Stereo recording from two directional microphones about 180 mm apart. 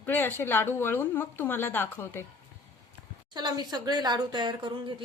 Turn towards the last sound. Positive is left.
turn(degrees=-25)  # may be behind; listen again after turning